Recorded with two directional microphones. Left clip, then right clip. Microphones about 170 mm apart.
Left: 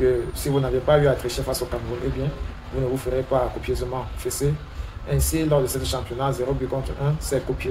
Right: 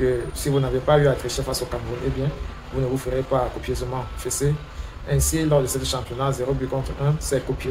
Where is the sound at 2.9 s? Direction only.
15° right (ahead or behind).